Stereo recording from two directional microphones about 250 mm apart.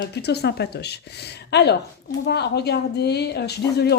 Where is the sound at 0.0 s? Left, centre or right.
Left.